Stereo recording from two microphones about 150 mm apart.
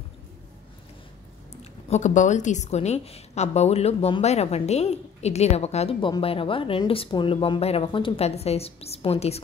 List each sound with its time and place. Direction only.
1.5 s a woman's voice: 45° left (ahead or behind)